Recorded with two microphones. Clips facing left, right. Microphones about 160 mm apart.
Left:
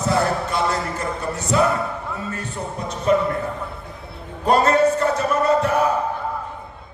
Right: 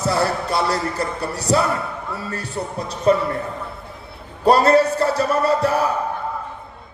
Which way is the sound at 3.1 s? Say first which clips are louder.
Right 2 dB; 35° right (ahead or behind).